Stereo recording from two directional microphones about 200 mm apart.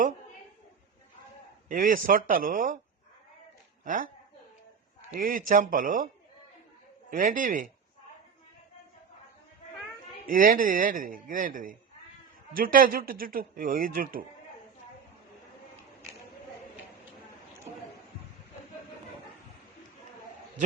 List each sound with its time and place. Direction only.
1.6 s speech: 45° right (ahead or behind)
3.8 s speech: 40° right (ahead or behind)
5.1 s speech: 45° right (ahead or behind)
7.1 s speech: 40° right (ahead or behind)
10.2 s speech: 45° right (ahead or behind)